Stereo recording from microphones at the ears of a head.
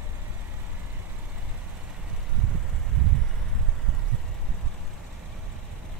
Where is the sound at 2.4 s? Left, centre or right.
Right.